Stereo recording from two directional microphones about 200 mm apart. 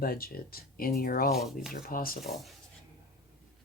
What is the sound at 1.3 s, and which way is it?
Speech, centre (ahead or behind).